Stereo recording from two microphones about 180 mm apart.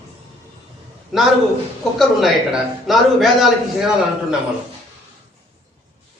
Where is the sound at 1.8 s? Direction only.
Centre (ahead or behind).